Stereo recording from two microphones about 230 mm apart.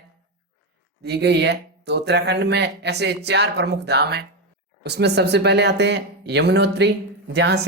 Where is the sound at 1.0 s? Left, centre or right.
Right.